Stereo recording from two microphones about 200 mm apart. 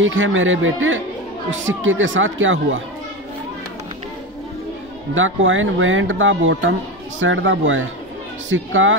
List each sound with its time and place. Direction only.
0.0 s speech: 75° right (ahead or behind)
5.1 s speech: 75° right (ahead or behind)